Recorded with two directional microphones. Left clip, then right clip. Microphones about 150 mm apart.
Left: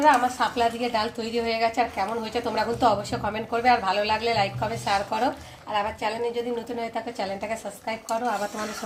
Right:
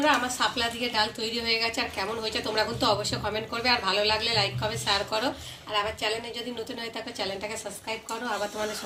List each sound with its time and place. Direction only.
0.0 s a woman's voice: 90° left